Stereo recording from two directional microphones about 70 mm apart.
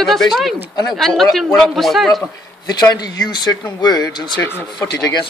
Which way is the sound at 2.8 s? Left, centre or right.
Left.